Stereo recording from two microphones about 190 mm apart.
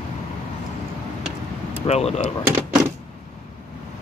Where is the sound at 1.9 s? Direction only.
35° left (ahead or behind).